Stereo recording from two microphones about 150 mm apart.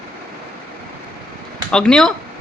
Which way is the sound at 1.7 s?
5° left (ahead or behind).